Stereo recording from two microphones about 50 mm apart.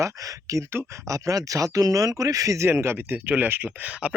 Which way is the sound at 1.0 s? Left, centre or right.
Right.